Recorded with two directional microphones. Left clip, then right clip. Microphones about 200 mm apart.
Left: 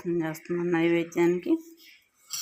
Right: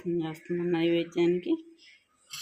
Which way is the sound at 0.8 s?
50° left (ahead or behind).